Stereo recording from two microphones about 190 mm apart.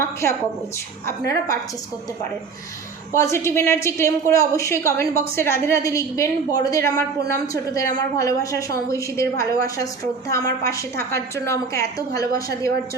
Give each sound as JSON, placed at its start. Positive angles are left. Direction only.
{"t": 0.0, "sound": "a woman's voice", "side_deg": 15}
{"t": 3.1, "sound": "a woman's voice", "side_deg": 15}